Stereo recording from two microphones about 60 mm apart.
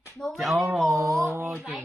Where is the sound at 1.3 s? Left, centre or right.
Right.